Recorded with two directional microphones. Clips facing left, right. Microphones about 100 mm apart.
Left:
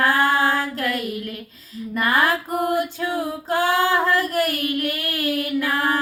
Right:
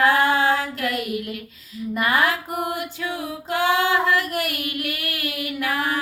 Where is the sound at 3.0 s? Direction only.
35° left (ahead or behind).